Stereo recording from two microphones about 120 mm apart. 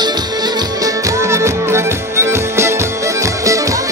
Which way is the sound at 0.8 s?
25° right (ahead or behind).